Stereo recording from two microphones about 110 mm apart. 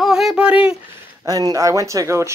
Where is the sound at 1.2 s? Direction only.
35° right (ahead or behind).